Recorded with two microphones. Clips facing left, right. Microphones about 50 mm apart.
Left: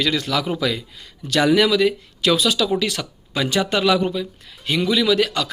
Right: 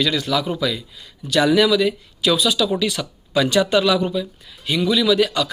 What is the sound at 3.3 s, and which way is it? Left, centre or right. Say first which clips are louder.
A man's voice: right 4 dB; left.